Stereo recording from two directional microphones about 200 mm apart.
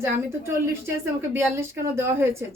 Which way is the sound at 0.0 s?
10° right (ahead or behind).